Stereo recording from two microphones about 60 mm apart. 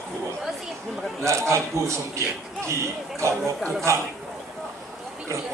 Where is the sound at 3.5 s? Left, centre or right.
Centre.